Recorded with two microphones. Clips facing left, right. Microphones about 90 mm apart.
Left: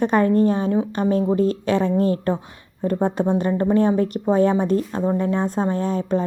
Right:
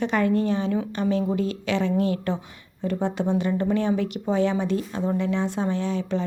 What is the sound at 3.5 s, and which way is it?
A woman's voice, 40° left (ahead or behind).